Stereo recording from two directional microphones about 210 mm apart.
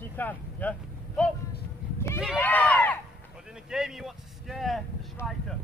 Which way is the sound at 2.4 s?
5° left (ahead or behind).